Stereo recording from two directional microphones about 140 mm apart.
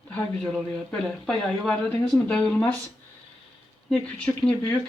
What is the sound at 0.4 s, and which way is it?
A man's voice, 10° left (ahead or behind).